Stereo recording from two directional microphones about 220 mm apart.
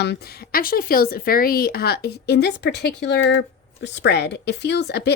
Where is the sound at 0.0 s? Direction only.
45° left (ahead or behind).